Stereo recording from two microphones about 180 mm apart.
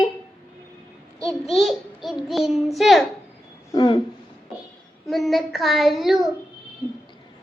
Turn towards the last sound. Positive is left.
turn(degrees=0)  # may be behind; listen again after turning